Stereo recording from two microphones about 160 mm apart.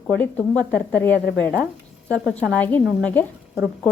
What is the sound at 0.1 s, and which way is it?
A woman's voice, 10° left (ahead or behind).